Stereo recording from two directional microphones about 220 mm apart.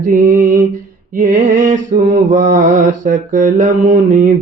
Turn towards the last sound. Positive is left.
turn(degrees=-35)  # may be behind; listen again after turning